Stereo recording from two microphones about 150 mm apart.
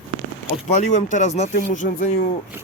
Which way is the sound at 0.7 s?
55° left (ahead or behind).